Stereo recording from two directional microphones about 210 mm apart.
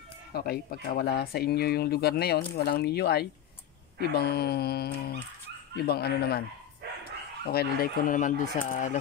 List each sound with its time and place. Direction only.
0.3 s speech: 50° left (ahead or behind)
7.4 s speech: 45° left (ahead or behind)